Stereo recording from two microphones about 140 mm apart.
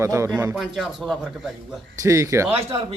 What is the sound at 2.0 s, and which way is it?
Speech, 25° right (ahead or behind).